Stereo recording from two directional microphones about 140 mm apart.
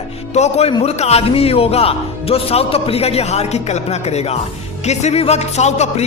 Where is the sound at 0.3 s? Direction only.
50° left (ahead or behind).